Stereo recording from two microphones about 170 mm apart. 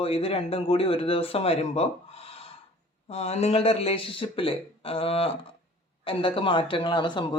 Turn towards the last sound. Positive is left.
turn(degrees=25)  # may be behind; listen again after turning